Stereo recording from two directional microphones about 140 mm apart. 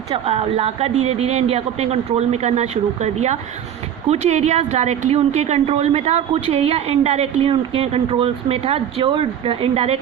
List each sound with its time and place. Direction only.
0.1 s a woman's voice: 45° right (ahead or behind)